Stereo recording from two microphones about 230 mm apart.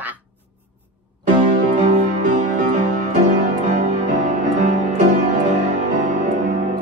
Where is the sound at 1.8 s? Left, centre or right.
Right.